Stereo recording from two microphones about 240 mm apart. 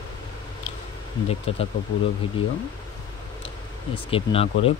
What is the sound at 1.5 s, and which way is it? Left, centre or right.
Speech, left.